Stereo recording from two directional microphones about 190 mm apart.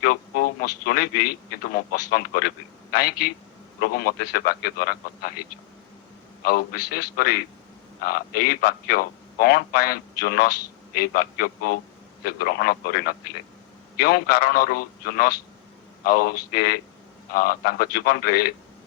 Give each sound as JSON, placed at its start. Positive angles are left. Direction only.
{"t": 0.0, "sound": "a man's voice", "side_deg": 50}
{"t": 6.4, "sound": "a man's voice", "side_deg": 50}